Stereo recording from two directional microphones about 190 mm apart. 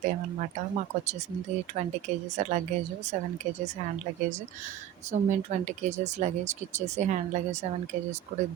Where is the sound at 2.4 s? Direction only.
35° right (ahead or behind).